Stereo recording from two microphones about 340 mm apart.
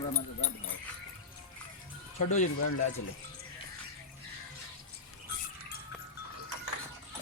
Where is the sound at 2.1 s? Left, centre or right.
Left.